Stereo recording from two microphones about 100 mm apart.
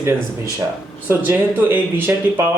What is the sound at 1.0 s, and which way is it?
Speech, 20° right (ahead or behind).